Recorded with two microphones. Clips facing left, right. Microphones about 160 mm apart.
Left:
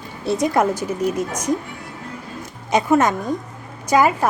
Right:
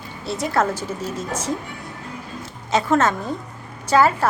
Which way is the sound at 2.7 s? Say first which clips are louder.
Left 2 dB; 15° left (ahead or behind).